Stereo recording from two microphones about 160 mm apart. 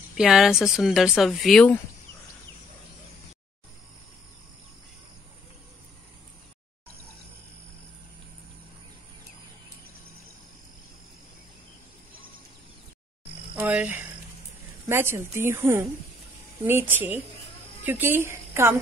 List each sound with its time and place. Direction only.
0.2 s speech: 5° right (ahead or behind)
13.6 s a sound: 10° right (ahead or behind)
14.9 s a woman's voice: 15° right (ahead or behind)